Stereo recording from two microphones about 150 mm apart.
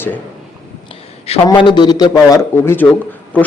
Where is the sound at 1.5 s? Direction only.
30° left (ahead or behind).